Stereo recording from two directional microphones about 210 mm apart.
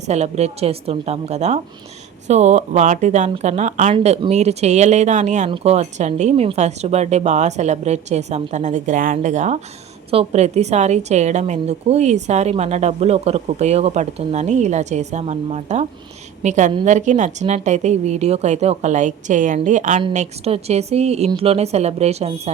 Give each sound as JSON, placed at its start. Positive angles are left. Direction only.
{"t": 0.1, "sound": "a woman's voice", "side_deg": -30}